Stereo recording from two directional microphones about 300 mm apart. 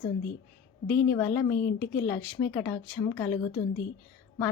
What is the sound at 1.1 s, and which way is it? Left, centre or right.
A woman's voice, centre.